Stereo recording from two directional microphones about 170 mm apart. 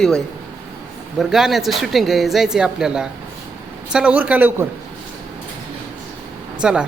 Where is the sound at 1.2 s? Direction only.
Centre (ahead or behind).